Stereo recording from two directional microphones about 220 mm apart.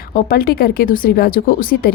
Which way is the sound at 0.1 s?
40° left (ahead or behind).